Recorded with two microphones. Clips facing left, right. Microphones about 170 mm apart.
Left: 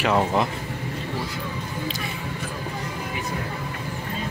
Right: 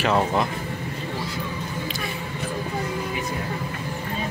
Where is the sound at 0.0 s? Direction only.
10° left (ahead or behind).